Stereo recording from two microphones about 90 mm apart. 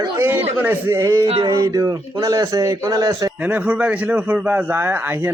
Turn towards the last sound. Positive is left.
turn(degrees=-20)  # may be behind; listen again after turning